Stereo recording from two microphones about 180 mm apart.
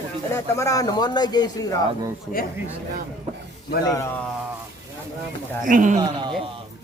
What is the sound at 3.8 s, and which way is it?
Speech, 15° left (ahead or behind).